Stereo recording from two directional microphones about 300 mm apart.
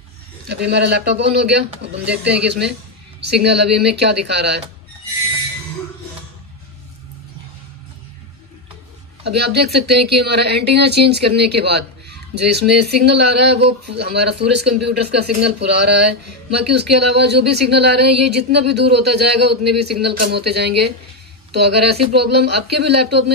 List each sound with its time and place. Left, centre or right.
0.5 s speech: right
9.2 s speech: right